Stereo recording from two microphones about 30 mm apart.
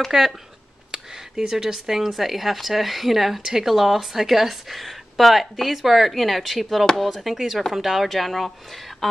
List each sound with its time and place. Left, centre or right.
0.1 s speech: centre
8.1 s speech: centre